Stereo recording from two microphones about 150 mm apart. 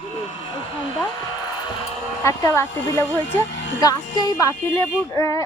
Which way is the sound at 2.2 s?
20° left (ahead or behind).